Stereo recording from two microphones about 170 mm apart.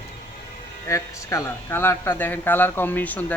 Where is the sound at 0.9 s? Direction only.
20° left (ahead or behind).